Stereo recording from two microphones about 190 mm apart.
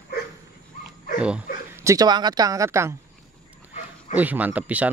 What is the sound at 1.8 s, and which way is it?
Speech, 15° right (ahead or behind).